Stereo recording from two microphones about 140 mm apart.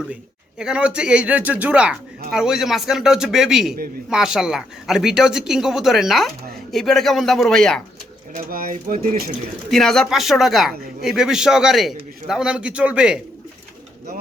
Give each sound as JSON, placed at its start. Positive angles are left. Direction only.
{"t": 0.6, "sound": "speech", "side_deg": -5}
{"t": 8.4, "sound": "speech", "side_deg": -90}
{"t": 9.6, "sound": "speech", "side_deg": 5}